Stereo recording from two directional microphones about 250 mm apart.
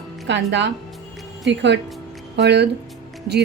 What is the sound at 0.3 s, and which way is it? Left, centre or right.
A woman's voice, right.